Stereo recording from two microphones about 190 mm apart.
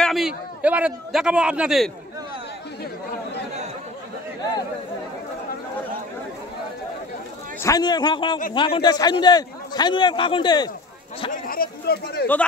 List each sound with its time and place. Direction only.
0.0 s a man's voice: centre (ahead or behind)
7.6 s a man's voice: 20° left (ahead or behind)
11.4 s speech: 50° left (ahead or behind)